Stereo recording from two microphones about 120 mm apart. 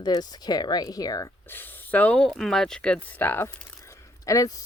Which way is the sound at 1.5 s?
15° left (ahead or behind).